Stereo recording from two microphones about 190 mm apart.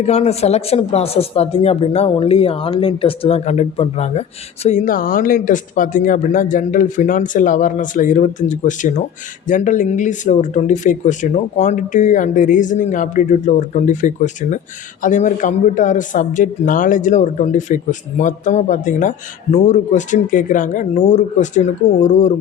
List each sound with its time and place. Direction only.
0.0 s speech: 35° left (ahead or behind)